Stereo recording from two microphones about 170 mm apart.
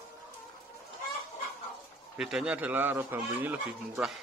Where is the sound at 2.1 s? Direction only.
5° right (ahead or behind).